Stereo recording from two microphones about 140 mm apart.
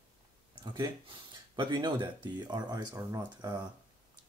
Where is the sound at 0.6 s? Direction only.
35° right (ahead or behind).